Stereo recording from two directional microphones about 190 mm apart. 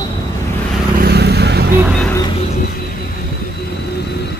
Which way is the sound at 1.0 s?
55° right (ahead or behind).